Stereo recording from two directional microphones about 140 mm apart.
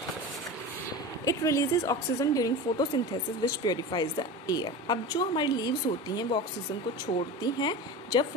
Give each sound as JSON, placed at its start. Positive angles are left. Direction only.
{"t": 1.2, "sound": "a woman's voice", "side_deg": 20}
{"t": 7.4, "sound": "speech", "side_deg": 30}